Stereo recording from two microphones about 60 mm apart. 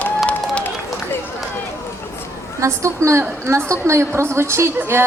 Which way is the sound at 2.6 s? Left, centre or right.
Right.